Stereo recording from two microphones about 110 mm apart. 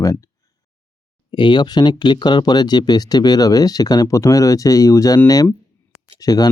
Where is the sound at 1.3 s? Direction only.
45° left (ahead or behind).